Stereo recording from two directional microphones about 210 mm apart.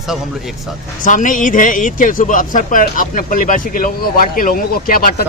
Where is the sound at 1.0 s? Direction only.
40° left (ahead or behind).